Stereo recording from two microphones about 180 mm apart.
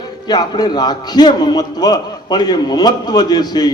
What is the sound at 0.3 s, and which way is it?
A man's voice, 20° left (ahead or behind).